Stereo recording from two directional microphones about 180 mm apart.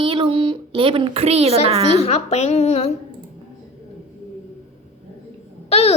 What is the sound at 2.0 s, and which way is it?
Speech, 35° left (ahead or behind).